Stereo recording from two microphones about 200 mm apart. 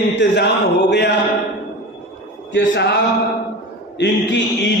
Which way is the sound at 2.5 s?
60° left (ahead or behind).